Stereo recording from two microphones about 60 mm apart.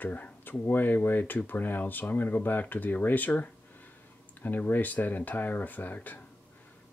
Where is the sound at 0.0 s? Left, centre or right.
Left.